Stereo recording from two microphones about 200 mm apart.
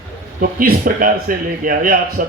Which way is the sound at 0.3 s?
45° right (ahead or behind).